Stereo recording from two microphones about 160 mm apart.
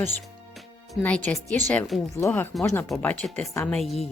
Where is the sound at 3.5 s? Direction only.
15° left (ahead or behind).